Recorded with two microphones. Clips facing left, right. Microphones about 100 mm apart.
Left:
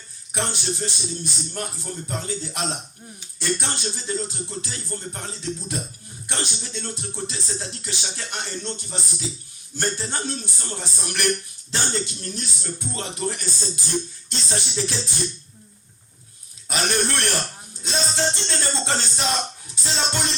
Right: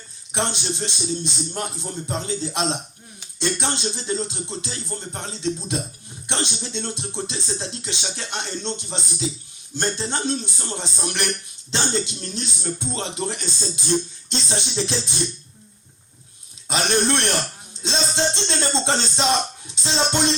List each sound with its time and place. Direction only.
0.3 s speech: 20° right (ahead or behind)
16.6 s speech: 20° right (ahead or behind)